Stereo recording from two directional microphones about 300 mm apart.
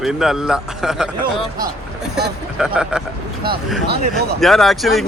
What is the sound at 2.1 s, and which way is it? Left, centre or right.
Speech, centre.